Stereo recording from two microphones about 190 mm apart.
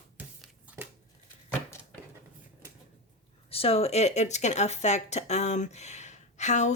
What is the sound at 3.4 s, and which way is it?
Speech, 30° left (ahead or behind).